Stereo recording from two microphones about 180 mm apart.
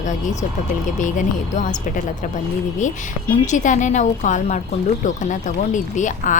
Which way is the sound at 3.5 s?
45° left (ahead or behind).